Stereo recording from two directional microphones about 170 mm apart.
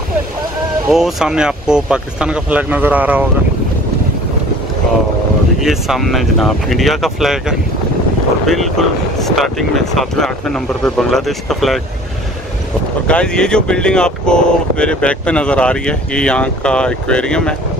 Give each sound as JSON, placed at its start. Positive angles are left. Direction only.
{"t": 0.8, "sound": "speech", "side_deg": -5}
{"t": 5.6, "sound": "speech", "side_deg": 0}
{"t": 13.0, "sound": "speech", "side_deg": 5}